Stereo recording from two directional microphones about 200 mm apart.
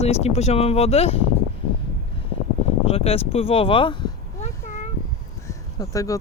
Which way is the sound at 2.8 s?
30° left (ahead or behind).